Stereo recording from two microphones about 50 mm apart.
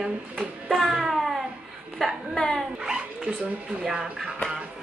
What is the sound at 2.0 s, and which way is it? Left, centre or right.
Speech, centre.